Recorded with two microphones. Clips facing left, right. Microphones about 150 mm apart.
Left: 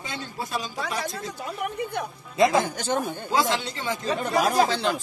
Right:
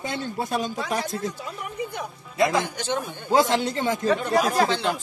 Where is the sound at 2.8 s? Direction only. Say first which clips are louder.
Left 2 dB; 45° left (ahead or behind).